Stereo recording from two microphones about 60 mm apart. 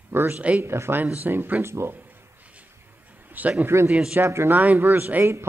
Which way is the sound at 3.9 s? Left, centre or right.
Centre.